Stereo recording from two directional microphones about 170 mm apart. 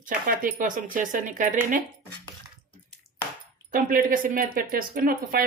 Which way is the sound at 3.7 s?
55° right (ahead or behind).